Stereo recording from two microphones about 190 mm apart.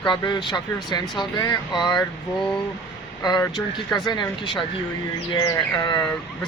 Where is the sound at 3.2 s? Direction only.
20° left (ahead or behind).